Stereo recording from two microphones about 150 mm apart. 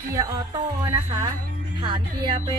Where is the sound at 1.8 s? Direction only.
30° right (ahead or behind).